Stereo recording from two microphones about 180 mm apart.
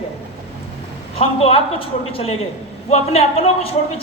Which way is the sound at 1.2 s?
35° left (ahead or behind).